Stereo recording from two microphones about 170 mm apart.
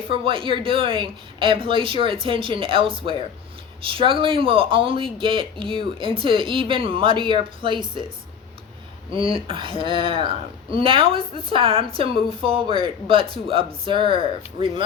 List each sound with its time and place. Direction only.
0.1 s speech: 30° right (ahead or behind)
9.1 s speech: 30° right (ahead or behind)